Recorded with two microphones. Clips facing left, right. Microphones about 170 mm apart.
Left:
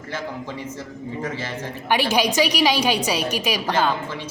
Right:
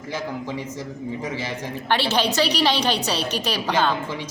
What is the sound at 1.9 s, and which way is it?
A woman's voice, 15° left (ahead or behind).